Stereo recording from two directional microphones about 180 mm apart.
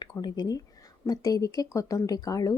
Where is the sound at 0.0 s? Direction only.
20° left (ahead or behind).